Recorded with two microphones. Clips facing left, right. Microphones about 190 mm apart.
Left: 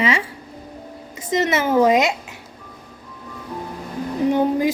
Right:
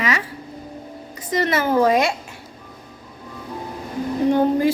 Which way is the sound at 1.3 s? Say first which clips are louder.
Left 1 dB; 20° left (ahead or behind).